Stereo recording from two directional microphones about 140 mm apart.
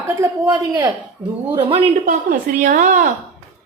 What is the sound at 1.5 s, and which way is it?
Speech, 40° right (ahead or behind).